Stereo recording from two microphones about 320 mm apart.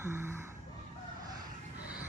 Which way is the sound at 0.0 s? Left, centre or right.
Centre.